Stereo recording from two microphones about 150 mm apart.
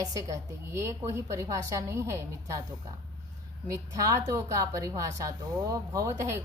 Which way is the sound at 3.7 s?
20° right (ahead or behind).